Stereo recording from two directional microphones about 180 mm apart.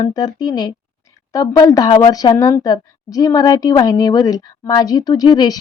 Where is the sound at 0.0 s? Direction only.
20° left (ahead or behind).